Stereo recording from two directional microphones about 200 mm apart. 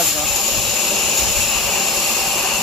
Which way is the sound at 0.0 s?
Centre (ahead or behind).